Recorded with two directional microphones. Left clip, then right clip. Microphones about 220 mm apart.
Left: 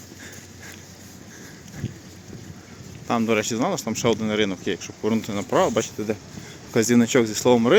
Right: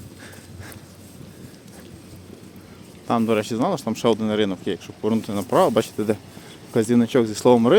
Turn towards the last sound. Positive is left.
turn(degrees=-15)  # may be behind; listen again after turning